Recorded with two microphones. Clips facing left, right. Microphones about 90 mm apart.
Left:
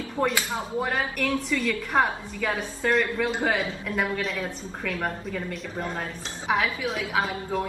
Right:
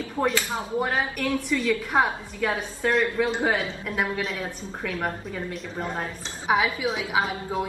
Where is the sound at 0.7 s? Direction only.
5° right (ahead or behind).